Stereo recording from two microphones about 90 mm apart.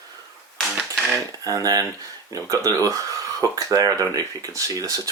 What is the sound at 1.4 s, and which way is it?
Speech, 45° right (ahead or behind).